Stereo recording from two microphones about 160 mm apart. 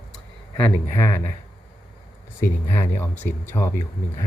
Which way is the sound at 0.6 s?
15° left (ahead or behind).